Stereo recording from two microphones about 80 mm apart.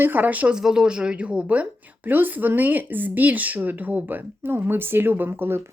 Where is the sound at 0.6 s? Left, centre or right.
Centre; by 5.6 s right.